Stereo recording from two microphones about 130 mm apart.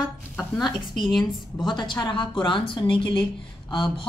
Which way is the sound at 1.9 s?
40° left (ahead or behind).